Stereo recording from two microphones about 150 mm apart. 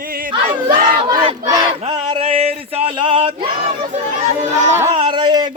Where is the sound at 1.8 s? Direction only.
35° right (ahead or behind).